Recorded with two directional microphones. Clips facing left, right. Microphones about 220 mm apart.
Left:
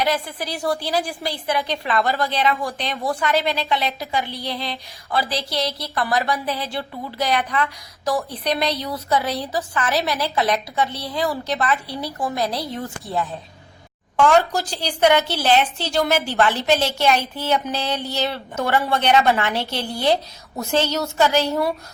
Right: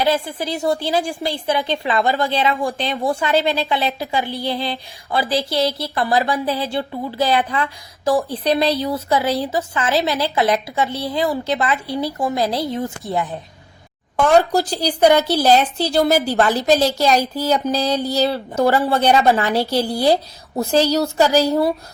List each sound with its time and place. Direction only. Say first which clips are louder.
0.0 s speech: right 4 dB; 30° right (ahead or behind)
14.3 s a woman's voice: right 4 dB; 35° right (ahead or behind)